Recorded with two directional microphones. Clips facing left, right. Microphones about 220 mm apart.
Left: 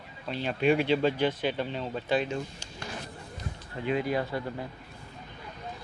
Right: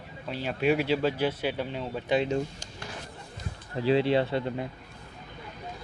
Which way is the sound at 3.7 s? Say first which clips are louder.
Right 5 dB; 30° right (ahead or behind).